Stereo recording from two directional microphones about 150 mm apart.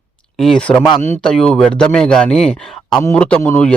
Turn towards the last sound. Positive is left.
turn(degrees=10)  # may be behind; listen again after turning